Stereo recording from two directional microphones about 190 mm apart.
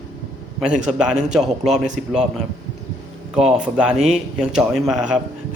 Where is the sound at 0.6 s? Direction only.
Centre (ahead or behind).